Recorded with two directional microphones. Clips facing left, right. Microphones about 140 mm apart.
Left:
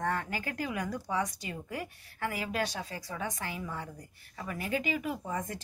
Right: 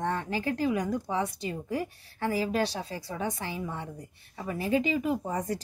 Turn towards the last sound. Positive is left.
turn(degrees=-35)  # may be behind; listen again after turning